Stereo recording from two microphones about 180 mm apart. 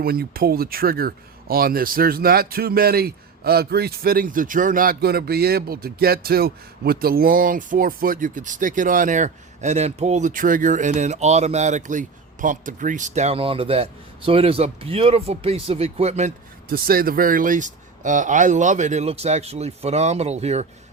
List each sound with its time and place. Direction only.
0.0 s speech: 60° right (ahead or behind); by 16.3 s 40° right (ahead or behind)
16.6 s speech: 55° right (ahead or behind); by 20.7 s 35° right (ahead or behind)